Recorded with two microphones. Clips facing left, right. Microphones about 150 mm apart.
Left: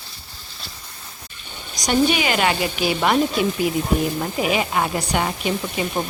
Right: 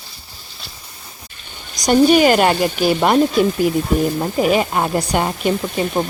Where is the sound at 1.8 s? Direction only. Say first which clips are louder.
Right 7 dB; 45° right (ahead or behind).